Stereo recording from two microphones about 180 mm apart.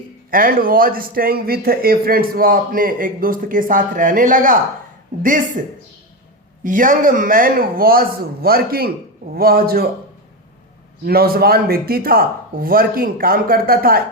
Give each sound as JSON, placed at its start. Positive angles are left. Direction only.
{"t": 0.3, "sound": "speech", "side_deg": -50}
{"t": 6.6, "sound": "speech", "side_deg": -50}
{"t": 11.0, "sound": "speech", "side_deg": -55}